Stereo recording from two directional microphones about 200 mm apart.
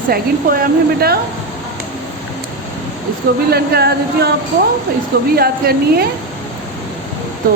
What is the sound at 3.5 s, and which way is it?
Speech, 55° right (ahead or behind).